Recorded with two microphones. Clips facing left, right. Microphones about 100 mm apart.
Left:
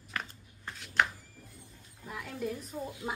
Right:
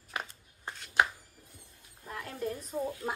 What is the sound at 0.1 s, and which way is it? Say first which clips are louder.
Shuffling cards: right 1 dB; 15° right (ahead or behind).